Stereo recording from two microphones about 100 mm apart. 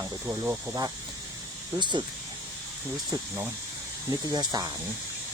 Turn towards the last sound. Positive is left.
turn(degrees=-45)  # may be behind; listen again after turning